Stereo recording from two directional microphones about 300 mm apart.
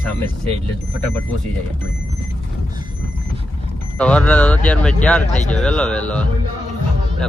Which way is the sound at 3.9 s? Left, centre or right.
Centre.